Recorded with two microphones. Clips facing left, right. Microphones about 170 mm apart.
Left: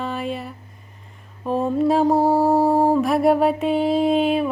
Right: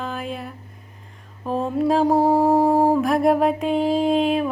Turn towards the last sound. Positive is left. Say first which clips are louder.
# left 1 dB
turn(degrees=0)  # may be behind; listen again after turning